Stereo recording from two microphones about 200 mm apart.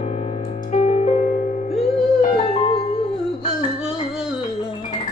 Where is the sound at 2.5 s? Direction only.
25° left (ahead or behind).